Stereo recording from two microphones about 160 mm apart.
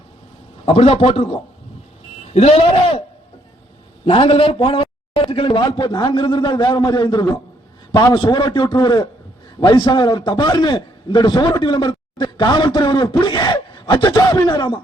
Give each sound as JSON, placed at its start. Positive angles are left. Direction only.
{"t": 0.6, "sound": "a man's voice", "side_deg": 35}
{"t": 4.0, "sound": "a man's voice", "side_deg": 35}